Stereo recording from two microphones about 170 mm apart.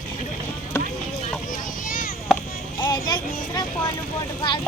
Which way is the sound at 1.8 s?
55° left (ahead or behind).